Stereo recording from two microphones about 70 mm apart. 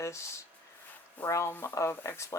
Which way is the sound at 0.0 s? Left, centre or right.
Left.